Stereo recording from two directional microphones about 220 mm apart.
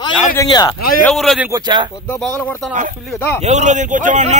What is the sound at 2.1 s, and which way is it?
A man's voice, 5° left (ahead or behind).